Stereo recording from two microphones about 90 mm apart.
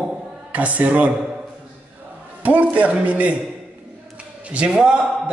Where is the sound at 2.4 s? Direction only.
15° right (ahead or behind).